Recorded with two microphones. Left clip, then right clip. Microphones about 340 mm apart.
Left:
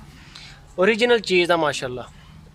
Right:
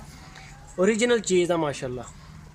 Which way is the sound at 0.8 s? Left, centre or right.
Left.